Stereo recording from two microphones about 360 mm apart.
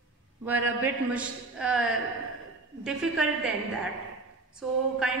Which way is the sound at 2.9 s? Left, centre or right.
Centre.